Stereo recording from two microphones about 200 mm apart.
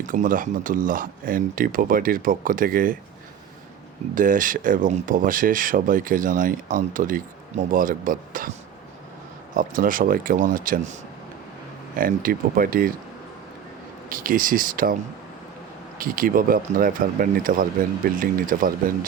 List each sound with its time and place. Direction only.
0.0 s speech: 40° right (ahead or behind)
4.1 s speech: 40° right (ahead or behind)
9.6 s speech: 45° right (ahead or behind)
11.9 s speech: 45° right (ahead or behind)
14.1 s speech: 45° right (ahead or behind)
16.0 s speech: 45° right (ahead or behind)